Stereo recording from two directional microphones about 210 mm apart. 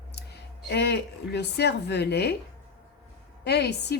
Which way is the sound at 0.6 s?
50° left (ahead or behind).